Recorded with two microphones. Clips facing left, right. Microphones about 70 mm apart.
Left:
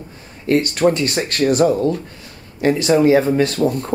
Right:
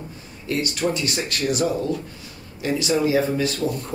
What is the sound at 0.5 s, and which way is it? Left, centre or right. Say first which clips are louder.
Speech: left 8 dB; left.